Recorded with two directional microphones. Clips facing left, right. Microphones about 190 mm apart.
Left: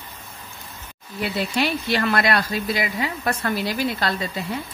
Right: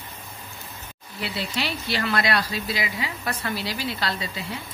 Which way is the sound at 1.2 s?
50° left (ahead or behind).